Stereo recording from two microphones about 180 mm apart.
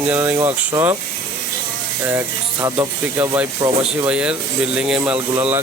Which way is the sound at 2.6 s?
20° right (ahead or behind).